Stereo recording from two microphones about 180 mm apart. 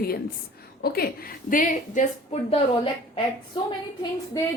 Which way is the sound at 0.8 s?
60° left (ahead or behind).